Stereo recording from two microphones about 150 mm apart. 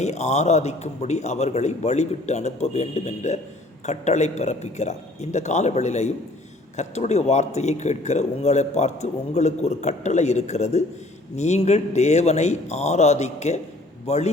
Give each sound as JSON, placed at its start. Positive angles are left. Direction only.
{"t": 0.0, "sound": "speech", "side_deg": 50}